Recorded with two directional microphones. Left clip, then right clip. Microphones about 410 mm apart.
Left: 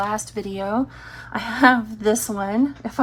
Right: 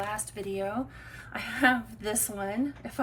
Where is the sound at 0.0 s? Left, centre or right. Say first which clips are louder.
Left 9 dB; centre.